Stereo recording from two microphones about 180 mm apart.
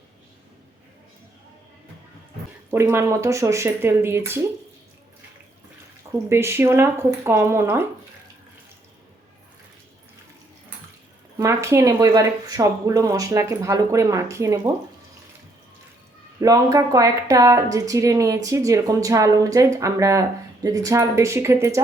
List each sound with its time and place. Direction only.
2.6 s speech: 15° right (ahead or behind)
6.2 s speech: 15° right (ahead or behind)
11.3 s speech: 15° right (ahead or behind)
16.4 s a woman's voice: 20° right (ahead or behind)